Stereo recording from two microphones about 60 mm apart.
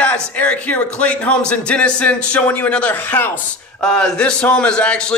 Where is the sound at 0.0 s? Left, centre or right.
Left.